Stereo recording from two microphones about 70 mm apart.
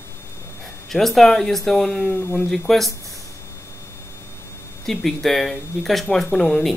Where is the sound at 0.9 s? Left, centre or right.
Centre.